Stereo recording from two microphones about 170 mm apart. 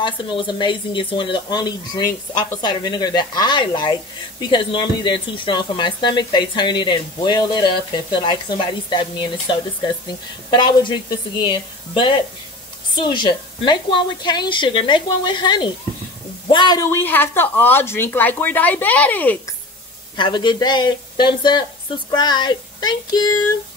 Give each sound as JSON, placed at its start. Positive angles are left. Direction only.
{"t": 0.0, "sound": "speech", "side_deg": 30}
{"t": 20.2, "sound": "speech", "side_deg": 30}